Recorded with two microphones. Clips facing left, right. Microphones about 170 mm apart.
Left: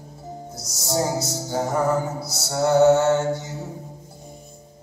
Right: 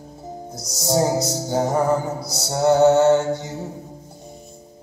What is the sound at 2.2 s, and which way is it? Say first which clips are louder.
Mantra: right 3 dB; 20° right (ahead or behind).